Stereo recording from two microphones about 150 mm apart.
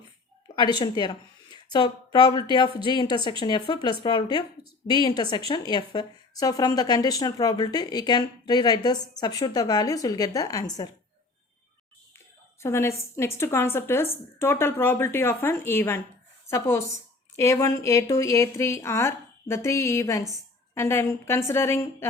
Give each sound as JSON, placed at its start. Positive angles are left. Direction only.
{"t": 0.4, "sound": "a woman's voice", "side_deg": 30}
{"t": 12.6, "sound": "a woman's voice", "side_deg": 15}